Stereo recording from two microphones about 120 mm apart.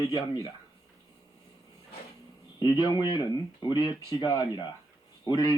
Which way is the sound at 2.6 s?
40° left (ahead or behind).